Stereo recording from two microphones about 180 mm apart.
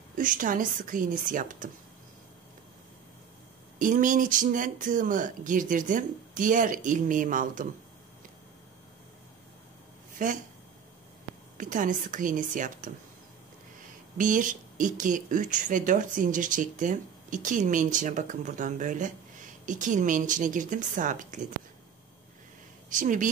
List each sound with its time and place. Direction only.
0.2 s speech: 50° right (ahead or behind)
3.8 s speech: 45° right (ahead or behind)
10.1 s speech: 45° right (ahead or behind)
11.5 s speech: 45° right (ahead or behind)
14.1 s speech: 45° right (ahead or behind)
22.8 s speech: 45° right (ahead or behind)